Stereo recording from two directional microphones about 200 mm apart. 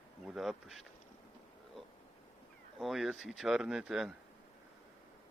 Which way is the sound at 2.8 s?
Centre (ahead or behind).